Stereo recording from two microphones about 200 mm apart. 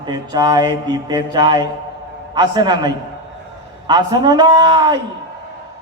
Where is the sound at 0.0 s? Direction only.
20° right (ahead or behind).